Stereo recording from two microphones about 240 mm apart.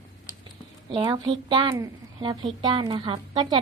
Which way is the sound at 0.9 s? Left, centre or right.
Centre.